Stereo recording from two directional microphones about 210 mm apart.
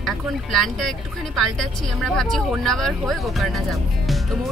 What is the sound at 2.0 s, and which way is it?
Speech, centre (ahead or behind).